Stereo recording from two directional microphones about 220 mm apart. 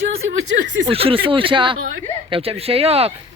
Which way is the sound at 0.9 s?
25° right (ahead or behind).